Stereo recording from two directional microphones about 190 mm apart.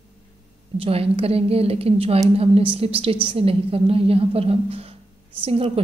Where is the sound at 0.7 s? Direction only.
30° right (ahead or behind).